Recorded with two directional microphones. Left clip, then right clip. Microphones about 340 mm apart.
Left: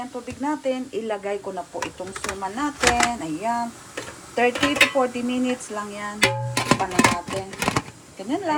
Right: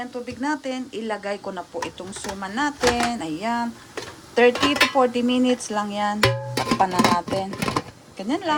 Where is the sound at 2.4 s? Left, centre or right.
Centre.